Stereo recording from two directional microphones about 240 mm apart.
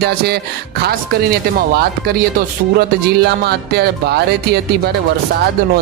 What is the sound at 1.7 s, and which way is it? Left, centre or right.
Speech, right.